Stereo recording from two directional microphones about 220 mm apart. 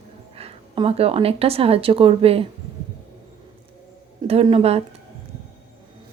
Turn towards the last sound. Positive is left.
turn(degrees=-25)  # may be behind; listen again after turning